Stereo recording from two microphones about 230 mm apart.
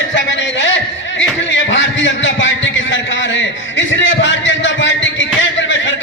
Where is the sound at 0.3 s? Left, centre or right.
Left.